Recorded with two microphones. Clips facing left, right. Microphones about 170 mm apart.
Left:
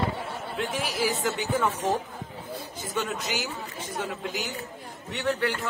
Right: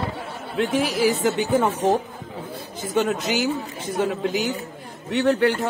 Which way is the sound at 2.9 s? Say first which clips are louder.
Right 9 dB; 65° right (ahead or behind).